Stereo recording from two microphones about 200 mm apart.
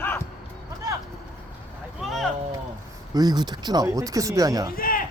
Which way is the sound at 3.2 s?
20° right (ahead or behind).